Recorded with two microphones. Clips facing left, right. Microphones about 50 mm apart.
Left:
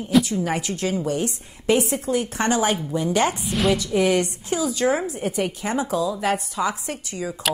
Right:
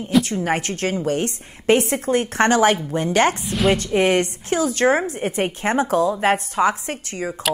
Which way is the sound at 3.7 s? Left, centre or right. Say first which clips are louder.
Right 2 dB; right.